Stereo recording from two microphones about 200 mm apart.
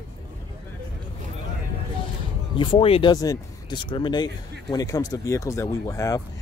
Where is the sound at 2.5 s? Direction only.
25° left (ahead or behind).